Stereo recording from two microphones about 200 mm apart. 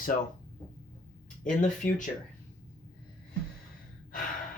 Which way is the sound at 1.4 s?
40° left (ahead or behind).